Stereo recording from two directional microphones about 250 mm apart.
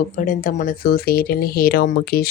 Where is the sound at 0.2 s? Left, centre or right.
Left.